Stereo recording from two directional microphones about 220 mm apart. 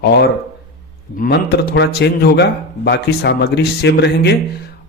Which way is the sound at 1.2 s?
50° left (ahead or behind).